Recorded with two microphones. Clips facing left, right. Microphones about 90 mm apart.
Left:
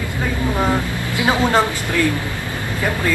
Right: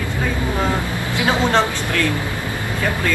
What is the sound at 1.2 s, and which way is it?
Speech, 15° left (ahead or behind).